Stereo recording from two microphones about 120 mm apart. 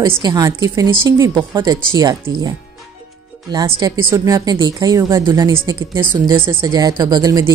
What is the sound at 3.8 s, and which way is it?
A woman's voice, 35° right (ahead or behind).